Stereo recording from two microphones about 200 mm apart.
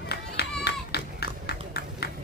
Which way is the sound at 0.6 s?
55° left (ahead or behind).